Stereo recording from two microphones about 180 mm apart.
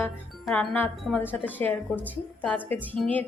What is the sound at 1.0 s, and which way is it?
A woman's voice, 10° left (ahead or behind).